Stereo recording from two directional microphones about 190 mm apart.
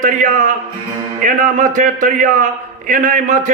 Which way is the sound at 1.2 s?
40° right (ahead or behind).